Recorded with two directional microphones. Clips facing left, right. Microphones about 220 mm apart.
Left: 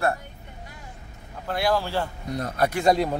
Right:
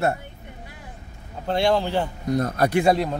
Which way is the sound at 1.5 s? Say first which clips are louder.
Right 4 dB; 25° right (ahead or behind).